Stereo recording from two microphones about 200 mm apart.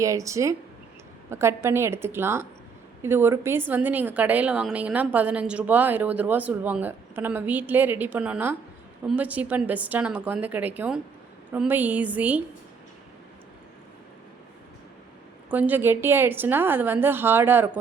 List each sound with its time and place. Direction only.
0.0 s a woman's voice: 15° right (ahead or behind)
15.4 s a woman's voice: 10° right (ahead or behind)